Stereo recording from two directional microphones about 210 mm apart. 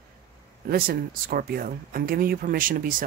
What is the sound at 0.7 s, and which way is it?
Speech, 45° right (ahead or behind).